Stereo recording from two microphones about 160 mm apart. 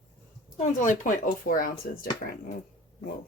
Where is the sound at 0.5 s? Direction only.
50° left (ahead or behind).